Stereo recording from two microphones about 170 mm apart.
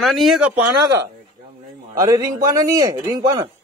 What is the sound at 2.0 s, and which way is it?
Speech, 20° right (ahead or behind).